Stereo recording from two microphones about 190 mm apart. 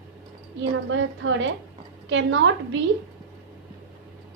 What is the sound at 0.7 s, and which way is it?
A woman's voice, 80° right.